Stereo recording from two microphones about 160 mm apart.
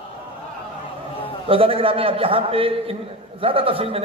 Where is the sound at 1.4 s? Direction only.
35° right (ahead or behind).